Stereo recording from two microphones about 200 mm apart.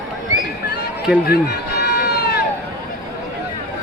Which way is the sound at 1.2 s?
55° left (ahead or behind).